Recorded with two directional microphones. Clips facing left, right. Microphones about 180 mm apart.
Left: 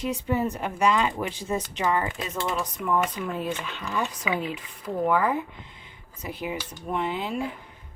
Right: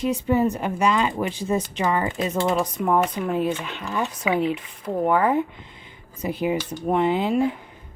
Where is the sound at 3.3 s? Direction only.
20° right (ahead or behind).